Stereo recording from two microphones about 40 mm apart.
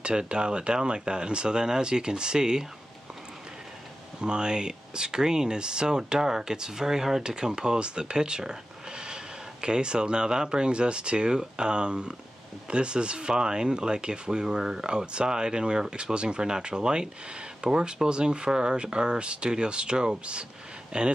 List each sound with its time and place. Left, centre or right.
0.0 s speech: right
4.2 s speech: right